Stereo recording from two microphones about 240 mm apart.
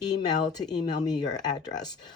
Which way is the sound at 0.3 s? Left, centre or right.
Centre.